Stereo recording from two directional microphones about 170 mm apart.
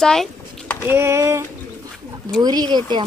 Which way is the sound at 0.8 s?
15° right (ahead or behind).